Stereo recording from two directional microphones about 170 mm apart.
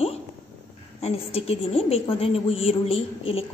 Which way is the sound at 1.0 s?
35° left (ahead or behind).